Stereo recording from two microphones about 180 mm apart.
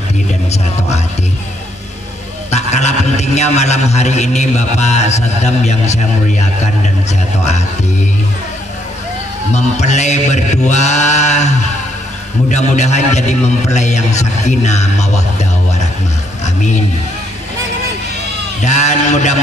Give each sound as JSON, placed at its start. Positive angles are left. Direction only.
{"t": 2.5, "sound": "a man's voice", "side_deg": 40}
{"t": 9.5, "sound": "a man's voice", "side_deg": 40}
{"t": 18.6, "sound": "a man's voice", "side_deg": 40}